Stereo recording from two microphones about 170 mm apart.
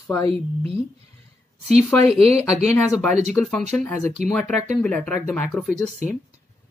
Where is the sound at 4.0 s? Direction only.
40° right (ahead or behind).